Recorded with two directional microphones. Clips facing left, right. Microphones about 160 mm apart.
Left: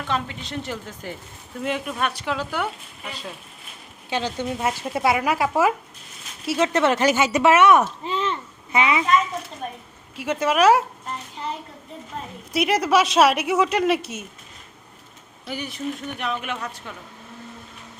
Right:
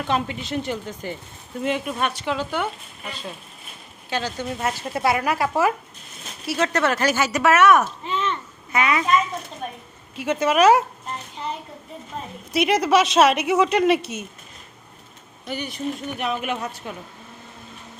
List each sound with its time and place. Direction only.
0.1 s a woman's voice: 15° right (ahead or behind)
0.6 s speech: centre (ahead or behind)
4.1 s speech: 20° left (ahead or behind)
10.2 s speech: 5° left (ahead or behind)
12.5 s speech: 5° left (ahead or behind)
15.4 s speech: 5° left (ahead or behind)
16.1 s a woman's voice: 10° right (ahead or behind)
16.6 s speech: 25° right (ahead or behind)